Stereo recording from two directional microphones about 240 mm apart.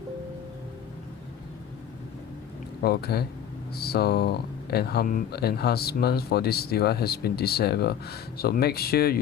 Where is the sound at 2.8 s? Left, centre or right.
Left.